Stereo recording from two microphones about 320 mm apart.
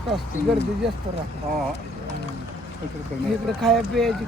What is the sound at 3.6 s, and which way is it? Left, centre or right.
Speech, centre.